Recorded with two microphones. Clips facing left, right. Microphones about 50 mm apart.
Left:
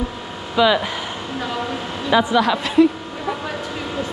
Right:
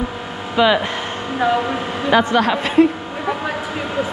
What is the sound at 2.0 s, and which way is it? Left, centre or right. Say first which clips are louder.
Speech: right 1 dB; right.